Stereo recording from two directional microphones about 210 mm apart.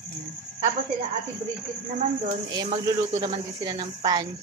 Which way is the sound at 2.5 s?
20° right (ahead or behind).